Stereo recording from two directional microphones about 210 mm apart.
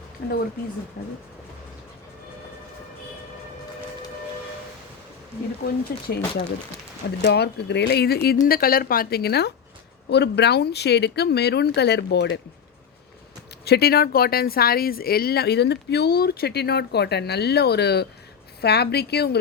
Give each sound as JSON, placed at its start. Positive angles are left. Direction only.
{"t": 1.0, "sound": "speech", "side_deg": 50}
{"t": 5.6, "sound": "speech", "side_deg": 50}
{"t": 13.7, "sound": "speech", "side_deg": 50}